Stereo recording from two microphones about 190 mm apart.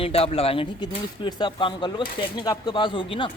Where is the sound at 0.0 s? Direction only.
30° left (ahead or behind).